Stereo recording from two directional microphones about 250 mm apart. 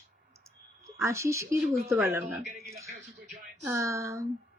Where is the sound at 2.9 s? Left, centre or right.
Right.